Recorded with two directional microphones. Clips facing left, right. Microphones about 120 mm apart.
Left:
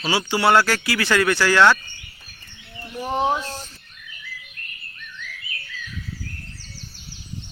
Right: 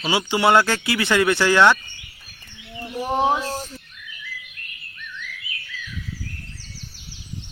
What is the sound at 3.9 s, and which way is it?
Bird, 40° left (ahead or behind).